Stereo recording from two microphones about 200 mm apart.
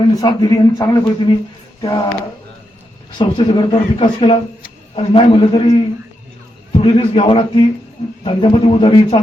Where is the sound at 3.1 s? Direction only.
25° left (ahead or behind).